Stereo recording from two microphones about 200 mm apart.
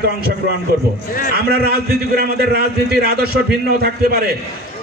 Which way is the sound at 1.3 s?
50° right (ahead or behind).